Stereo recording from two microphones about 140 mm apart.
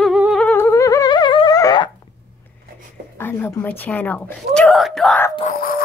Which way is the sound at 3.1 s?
15° left (ahead or behind).